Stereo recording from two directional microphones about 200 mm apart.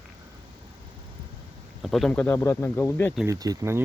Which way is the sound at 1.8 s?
Centre (ahead or behind).